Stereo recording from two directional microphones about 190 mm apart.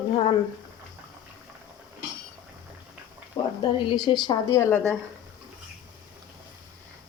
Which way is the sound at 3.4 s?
15° left (ahead or behind).